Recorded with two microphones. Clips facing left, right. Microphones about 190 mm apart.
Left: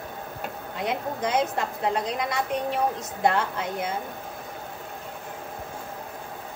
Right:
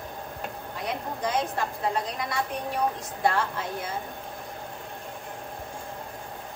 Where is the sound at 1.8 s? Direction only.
20° left (ahead or behind).